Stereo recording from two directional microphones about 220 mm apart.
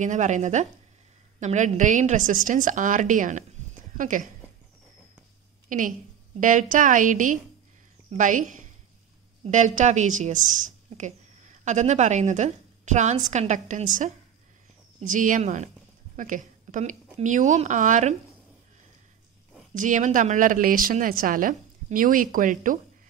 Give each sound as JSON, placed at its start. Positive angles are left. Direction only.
{"t": 0.0, "sound": "speech", "side_deg": -35}
{"t": 5.7, "sound": "a woman's voice", "side_deg": -35}
{"t": 19.7, "sound": "speech", "side_deg": -35}